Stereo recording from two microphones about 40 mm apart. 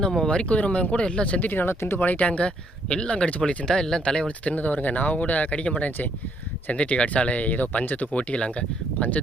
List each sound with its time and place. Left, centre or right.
0.3 s speech: left
1.4 s speech: left
2.2 s speech: left
3.7 s speech: centre
4.4 s speech: left